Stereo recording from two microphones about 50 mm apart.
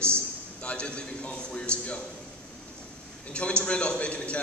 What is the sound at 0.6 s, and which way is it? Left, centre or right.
A man's voice, left.